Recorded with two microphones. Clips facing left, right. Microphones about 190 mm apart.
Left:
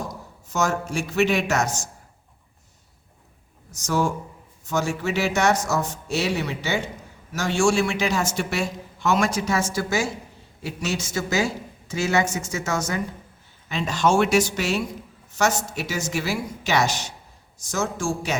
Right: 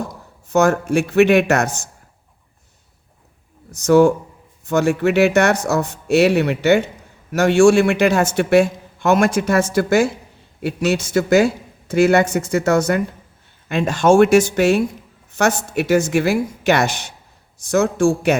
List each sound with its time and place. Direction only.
0.5 s a man's voice: 60° right (ahead or behind)
3.7 s a man's voice: 60° right (ahead or behind)